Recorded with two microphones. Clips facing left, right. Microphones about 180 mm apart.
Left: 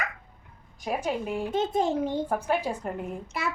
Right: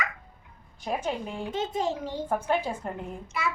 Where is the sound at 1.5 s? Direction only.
55° left (ahead or behind).